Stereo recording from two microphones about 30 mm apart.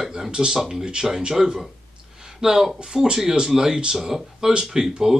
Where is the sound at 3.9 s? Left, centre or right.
Centre.